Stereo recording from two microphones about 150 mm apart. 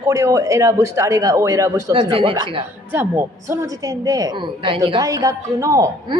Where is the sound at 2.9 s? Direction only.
15° right (ahead or behind).